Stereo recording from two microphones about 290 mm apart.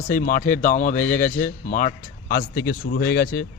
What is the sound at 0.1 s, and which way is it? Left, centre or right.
A man's voice, left.